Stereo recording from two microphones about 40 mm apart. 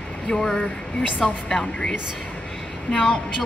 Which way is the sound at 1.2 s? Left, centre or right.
Centre.